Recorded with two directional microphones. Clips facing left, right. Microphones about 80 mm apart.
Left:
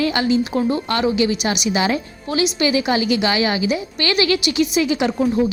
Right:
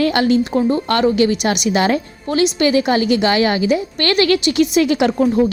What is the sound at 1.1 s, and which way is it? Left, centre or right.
A woman's voice, right.